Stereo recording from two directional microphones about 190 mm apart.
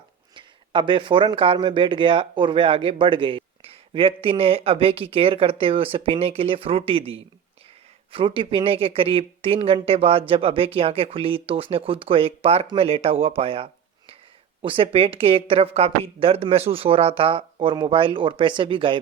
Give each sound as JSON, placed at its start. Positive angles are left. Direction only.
{"t": 0.3, "sound": "speech", "side_deg": -25}